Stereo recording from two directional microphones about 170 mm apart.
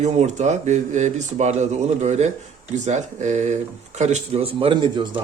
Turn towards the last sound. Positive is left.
turn(degrees=-30)  # may be behind; listen again after turning